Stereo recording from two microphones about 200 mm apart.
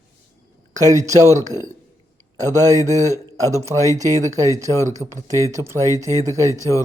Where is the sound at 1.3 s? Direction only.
35° right (ahead or behind).